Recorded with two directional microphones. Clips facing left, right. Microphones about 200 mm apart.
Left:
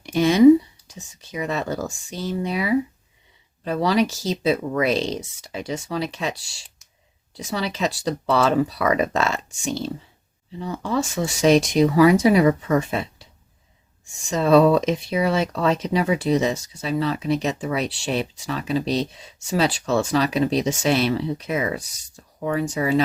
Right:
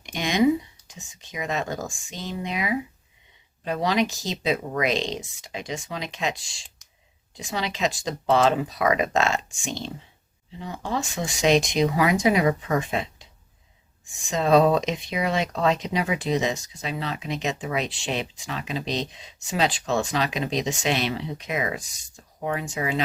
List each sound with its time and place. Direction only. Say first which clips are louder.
0.0 s speech: left 8 dB; 40° left (ahead or behind)
7.3 s speech: left 3 dB; 40° left (ahead or behind)
10.6 s speech: left 5 dB; 40° left (ahead or behind)
14.3 s speech: left 3 dB; 40° left (ahead or behind)